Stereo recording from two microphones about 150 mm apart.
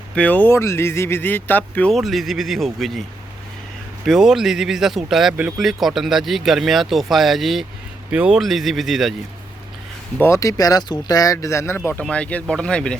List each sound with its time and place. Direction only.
0.2 s speech: 10° left (ahead or behind)
4.0 s speech: centre (ahead or behind)
10.2 s speech: 20° left (ahead or behind)